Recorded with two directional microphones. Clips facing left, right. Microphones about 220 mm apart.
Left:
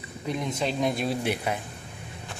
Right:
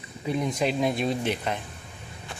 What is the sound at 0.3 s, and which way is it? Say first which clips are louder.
Speech: right 3 dB; 10° right (ahead or behind).